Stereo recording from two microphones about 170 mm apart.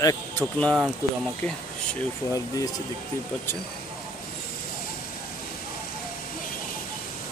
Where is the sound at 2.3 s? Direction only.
20° left (ahead or behind).